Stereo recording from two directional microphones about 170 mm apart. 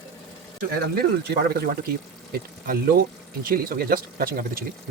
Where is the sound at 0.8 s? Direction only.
65° right (ahead or behind).